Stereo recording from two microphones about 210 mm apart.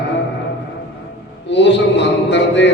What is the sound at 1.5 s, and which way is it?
A man's voice, 55° left (ahead or behind).